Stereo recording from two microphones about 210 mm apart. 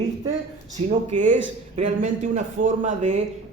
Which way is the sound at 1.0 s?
35° right (ahead or behind).